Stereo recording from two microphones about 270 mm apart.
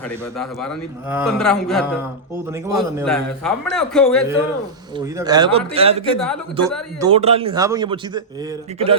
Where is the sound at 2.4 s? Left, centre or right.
Centre.